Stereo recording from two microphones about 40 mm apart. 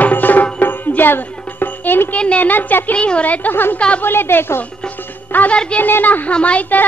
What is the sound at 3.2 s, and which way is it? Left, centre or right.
Music, left.